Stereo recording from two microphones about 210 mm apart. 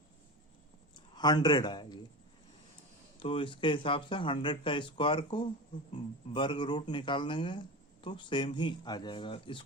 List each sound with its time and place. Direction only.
0.9 s speech: 20° left (ahead or behind)
3.2 s speech: 25° left (ahead or behind)